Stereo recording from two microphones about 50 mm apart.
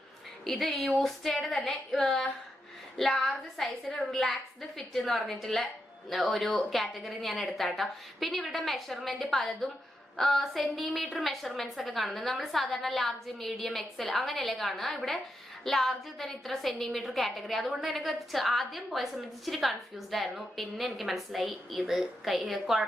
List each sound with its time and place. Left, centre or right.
0.4 s a woman's voice: centre